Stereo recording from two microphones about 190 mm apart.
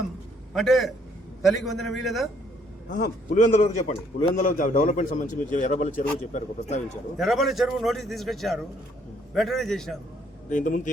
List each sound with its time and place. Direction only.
0.5 s a man's voice: centre (ahead or behind)
2.9 s a man's voice: 45° left (ahead or behind)
7.2 s a man's voice: centre (ahead or behind)
10.5 s speech: 40° left (ahead or behind)